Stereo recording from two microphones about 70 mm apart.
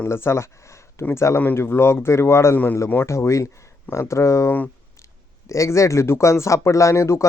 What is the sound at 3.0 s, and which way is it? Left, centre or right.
Speech, left.